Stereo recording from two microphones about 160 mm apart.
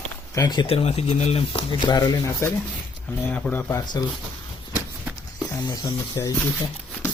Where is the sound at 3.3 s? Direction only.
10° left (ahead or behind).